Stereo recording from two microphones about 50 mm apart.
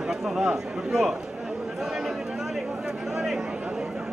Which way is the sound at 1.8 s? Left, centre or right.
Centre.